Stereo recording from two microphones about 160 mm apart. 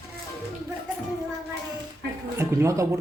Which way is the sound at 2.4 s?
20° right (ahead or behind).